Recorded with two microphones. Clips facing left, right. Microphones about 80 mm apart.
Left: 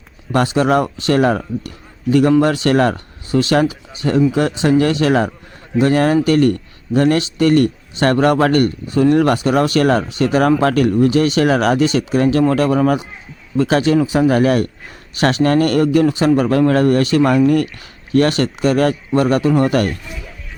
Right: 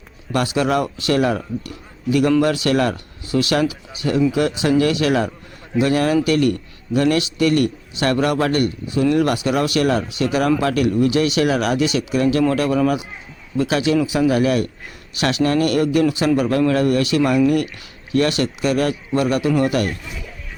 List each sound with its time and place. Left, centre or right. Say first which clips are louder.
0.3 s a man's voice: left 4 dB; left